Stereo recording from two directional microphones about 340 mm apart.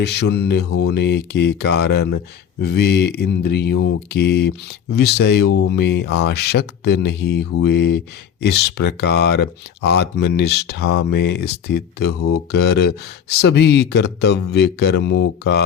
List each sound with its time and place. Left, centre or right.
0.0 s speech: left